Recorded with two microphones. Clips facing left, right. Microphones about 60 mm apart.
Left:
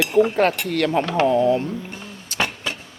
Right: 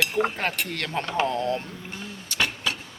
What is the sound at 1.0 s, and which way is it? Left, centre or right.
Speech, left.